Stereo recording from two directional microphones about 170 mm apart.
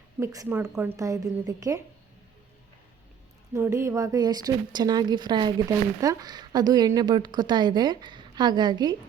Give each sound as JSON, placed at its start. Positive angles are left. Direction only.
{"t": 0.2, "sound": "a woman's voice", "side_deg": -20}
{"t": 3.5, "sound": "a woman's voice", "side_deg": -15}